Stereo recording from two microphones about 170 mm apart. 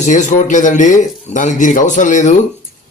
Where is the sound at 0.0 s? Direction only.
45° left (ahead or behind).